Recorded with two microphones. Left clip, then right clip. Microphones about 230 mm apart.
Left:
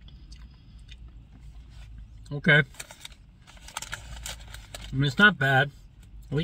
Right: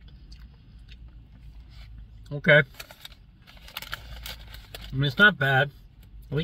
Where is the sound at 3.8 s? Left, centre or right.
Centre.